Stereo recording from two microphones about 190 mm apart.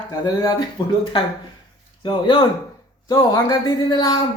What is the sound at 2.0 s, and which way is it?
Speech, 25° left (ahead or behind).